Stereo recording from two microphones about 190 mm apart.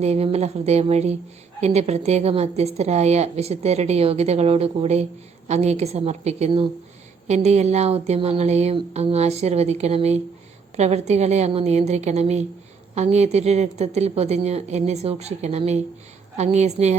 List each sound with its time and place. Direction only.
0.0 s a woman's voice: 35° right (ahead or behind)